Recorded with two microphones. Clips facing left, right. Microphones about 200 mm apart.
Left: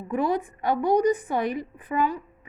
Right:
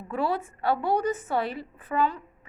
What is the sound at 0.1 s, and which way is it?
A woman's voice, 15° left (ahead or behind).